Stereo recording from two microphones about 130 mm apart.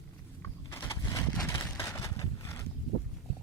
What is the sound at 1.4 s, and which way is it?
Vehicle, 20° left (ahead or behind).